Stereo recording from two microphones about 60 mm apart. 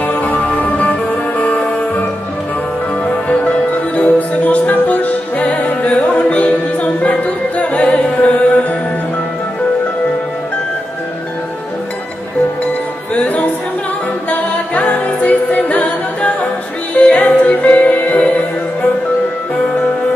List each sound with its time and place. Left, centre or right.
0.0 s music: left
3.1 s music: left
13.1 s music: left
14.3 s a capella: left
16.9 s music: left